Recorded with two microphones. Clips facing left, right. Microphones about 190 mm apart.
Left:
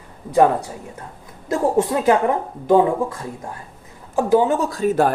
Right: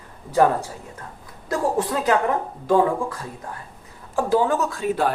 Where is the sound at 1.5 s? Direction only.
25° left (ahead or behind).